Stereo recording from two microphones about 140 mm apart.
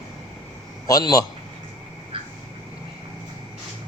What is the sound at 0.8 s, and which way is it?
Speech, 25° left (ahead or behind).